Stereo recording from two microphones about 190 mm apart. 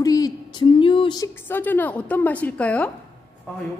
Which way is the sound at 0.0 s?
20° left (ahead or behind).